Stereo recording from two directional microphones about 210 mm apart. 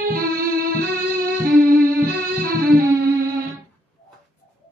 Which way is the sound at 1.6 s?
45° right (ahead or behind).